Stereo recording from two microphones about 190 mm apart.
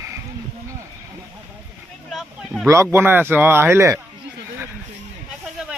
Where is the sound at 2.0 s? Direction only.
Centre (ahead or behind).